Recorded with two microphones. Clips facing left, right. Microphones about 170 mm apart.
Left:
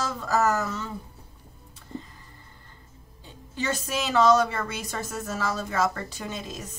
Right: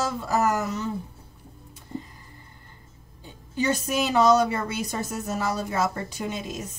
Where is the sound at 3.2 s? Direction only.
10° right (ahead or behind).